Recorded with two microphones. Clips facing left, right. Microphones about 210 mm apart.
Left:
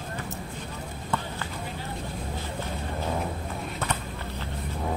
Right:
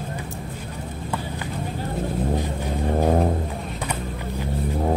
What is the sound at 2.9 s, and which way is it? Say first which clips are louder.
Music: right 11 dB; 50° right (ahead or behind).